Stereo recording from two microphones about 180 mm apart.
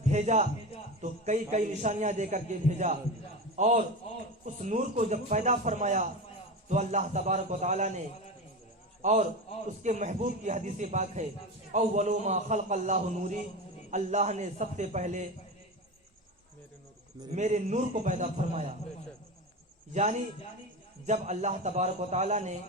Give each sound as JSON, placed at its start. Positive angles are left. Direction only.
{"t": 0.0, "sound": "a sound", "side_deg": -40}
{"t": 1.0, "sound": "a man's voice", "side_deg": -40}
{"t": 9.0, "sound": "a sound", "side_deg": -40}
{"t": 9.8, "sound": "a man's voice", "side_deg": -40}
{"t": 17.3, "sound": "a man's voice", "side_deg": -40}
{"t": 19.9, "sound": "a man's voice", "side_deg": -40}